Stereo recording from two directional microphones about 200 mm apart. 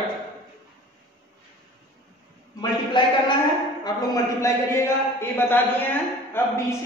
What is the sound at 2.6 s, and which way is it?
A man's voice, 25° left (ahead or behind).